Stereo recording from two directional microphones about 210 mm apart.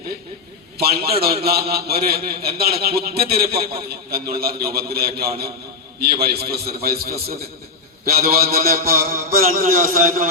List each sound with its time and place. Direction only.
0.8 s a man's voice: 45° right (ahead or behind)